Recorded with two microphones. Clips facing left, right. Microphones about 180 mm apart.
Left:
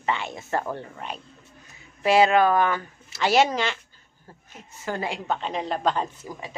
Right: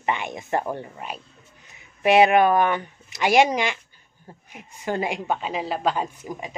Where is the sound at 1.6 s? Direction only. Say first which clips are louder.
Right 3 dB; 20° right (ahead or behind).